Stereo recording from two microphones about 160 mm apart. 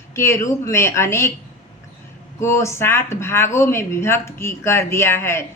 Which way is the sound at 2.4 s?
15° left (ahead or behind).